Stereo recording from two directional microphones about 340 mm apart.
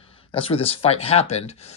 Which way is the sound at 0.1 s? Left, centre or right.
Centre.